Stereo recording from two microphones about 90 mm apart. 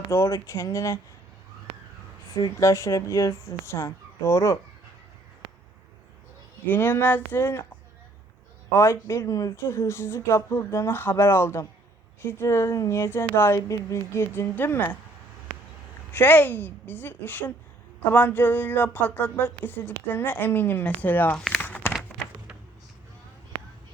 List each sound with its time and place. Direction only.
0.1 s speech: 35° left (ahead or behind)
2.6 s speech: 35° left (ahead or behind)
6.7 s speech: 25° left (ahead or behind)
8.7 s speech: 30° left (ahead or behind)
9.6 s speech: 30° left (ahead or behind)
16.1 s speech: 20° left (ahead or behind)
21.3 s speech: 5° left (ahead or behind)
21.6 s a sound: 20° left (ahead or behind)